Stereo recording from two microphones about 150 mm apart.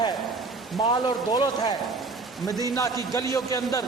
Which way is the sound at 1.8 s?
Centre (ahead or behind).